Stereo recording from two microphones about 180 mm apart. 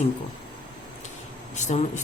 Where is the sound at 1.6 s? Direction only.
40° left (ahead or behind).